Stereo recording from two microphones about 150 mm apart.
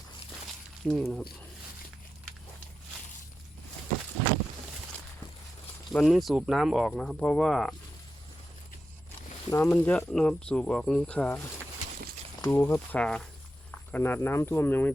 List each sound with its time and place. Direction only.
0.9 s speech: centre (ahead or behind)
5.9 s speech: 5° left (ahead or behind)
9.5 s speech: 15° left (ahead or behind)